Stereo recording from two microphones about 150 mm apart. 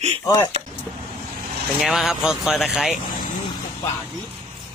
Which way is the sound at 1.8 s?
Centre (ahead or behind).